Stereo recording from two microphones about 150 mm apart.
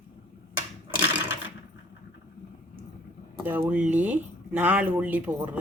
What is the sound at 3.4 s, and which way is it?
Speech, 15° right (ahead or behind).